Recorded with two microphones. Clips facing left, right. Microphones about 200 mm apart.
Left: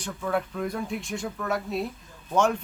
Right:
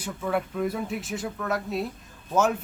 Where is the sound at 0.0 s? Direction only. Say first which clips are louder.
Even; 5° right (ahead or behind).